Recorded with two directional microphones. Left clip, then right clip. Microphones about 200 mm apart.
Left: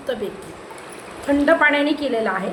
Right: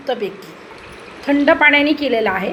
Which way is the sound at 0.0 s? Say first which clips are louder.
Right 4 dB; 15° right (ahead or behind).